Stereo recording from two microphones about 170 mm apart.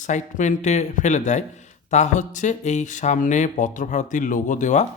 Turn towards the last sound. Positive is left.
turn(degrees=45)  # may be behind; listen again after turning